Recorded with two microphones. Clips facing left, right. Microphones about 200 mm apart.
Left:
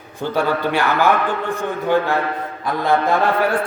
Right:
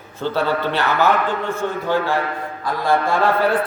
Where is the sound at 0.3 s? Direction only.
15° left (ahead or behind).